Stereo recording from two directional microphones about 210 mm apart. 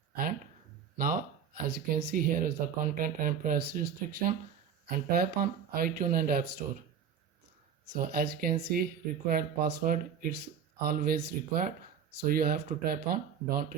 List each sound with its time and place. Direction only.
0.9 s speech: 45° right (ahead or behind)
7.9 s speech: 45° right (ahead or behind)